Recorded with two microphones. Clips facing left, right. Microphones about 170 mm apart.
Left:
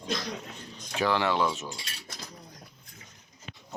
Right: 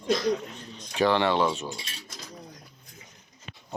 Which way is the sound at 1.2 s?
25° right (ahead or behind).